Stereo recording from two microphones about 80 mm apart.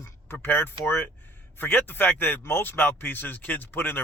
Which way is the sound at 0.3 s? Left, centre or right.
Left.